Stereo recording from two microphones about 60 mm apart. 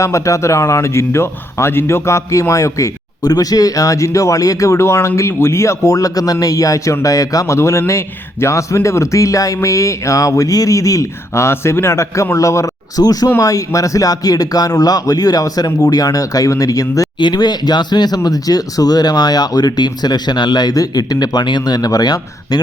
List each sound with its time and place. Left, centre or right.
0.0 s a man's voice: left
11.3 s a man's voice: left
13.4 s speech: left
18.2 s speech: left
20.7 s speech: left